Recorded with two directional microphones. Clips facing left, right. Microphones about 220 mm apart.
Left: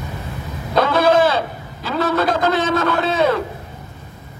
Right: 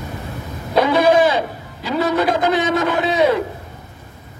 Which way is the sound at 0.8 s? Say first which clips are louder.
Right 1 dB; 15° right (ahead or behind).